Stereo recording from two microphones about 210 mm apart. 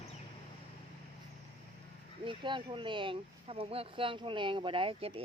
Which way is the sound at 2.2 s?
25° right (ahead or behind).